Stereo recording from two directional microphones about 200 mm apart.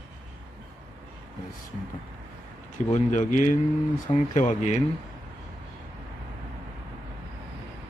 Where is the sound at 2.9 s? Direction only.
40° left (ahead or behind).